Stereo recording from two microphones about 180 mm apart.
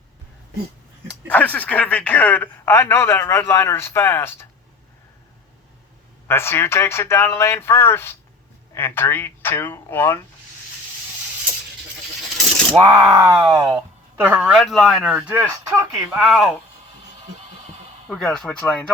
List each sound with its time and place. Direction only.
1.3 s speech: 10° left (ahead or behind)
6.2 s speech: 15° left (ahead or behind)
12.9 s speech: 20° right (ahead or behind); by 16.6 s 5° right (ahead or behind)
18.1 s speech: centre (ahead or behind)